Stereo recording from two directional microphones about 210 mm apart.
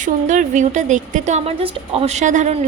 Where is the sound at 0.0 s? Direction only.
35° right (ahead or behind).